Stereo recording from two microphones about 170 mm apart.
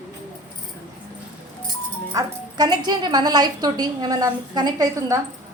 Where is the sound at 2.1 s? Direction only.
25° right (ahead or behind).